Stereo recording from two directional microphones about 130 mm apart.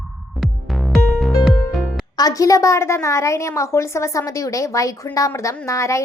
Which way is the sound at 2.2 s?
25° left (ahead or behind).